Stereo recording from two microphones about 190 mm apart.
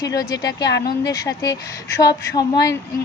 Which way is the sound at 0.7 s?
70° left (ahead or behind).